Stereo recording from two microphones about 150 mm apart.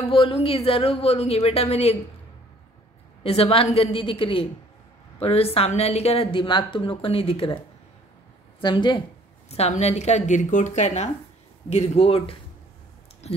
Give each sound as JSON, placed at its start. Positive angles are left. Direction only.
{"t": 0.1, "sound": "a woman's voice", "side_deg": 35}
{"t": 3.3, "sound": "a woman's voice", "side_deg": 40}
{"t": 9.5, "sound": "a woman's voice", "side_deg": 45}